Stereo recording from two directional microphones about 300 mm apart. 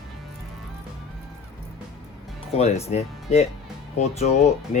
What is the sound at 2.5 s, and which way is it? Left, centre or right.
Speech, left.